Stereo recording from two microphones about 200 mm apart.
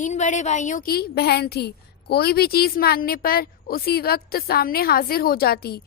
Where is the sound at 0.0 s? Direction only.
35° left (ahead or behind).